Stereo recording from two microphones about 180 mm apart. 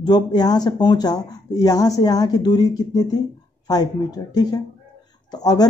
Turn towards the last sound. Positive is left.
turn(degrees=20)  # may be behind; listen again after turning